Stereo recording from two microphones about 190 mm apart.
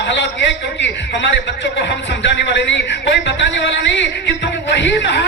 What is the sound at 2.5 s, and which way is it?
Speech, 65° left (ahead or behind).